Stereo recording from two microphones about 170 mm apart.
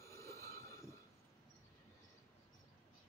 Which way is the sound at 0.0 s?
15° left (ahead or behind).